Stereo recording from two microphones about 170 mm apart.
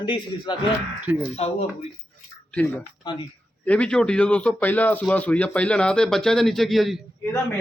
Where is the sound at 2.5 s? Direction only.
10° left (ahead or behind).